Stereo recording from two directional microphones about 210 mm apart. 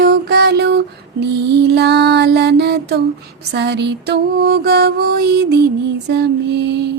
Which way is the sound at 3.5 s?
55° right (ahead or behind).